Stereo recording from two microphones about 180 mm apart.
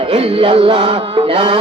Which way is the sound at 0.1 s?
30° right (ahead or behind).